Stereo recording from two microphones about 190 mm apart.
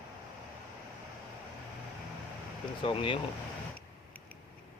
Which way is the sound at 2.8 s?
25° left (ahead or behind).